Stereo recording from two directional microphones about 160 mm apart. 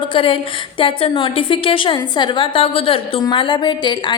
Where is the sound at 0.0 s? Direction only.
30° left (ahead or behind).